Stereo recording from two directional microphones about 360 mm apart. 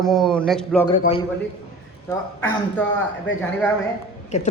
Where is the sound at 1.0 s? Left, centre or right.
Centre.